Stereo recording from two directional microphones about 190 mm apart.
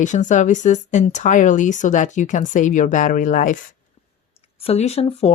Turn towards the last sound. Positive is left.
turn(degrees=35)  # may be behind; listen again after turning